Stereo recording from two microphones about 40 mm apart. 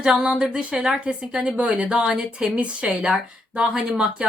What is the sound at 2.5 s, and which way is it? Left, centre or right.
A woman's voice, right.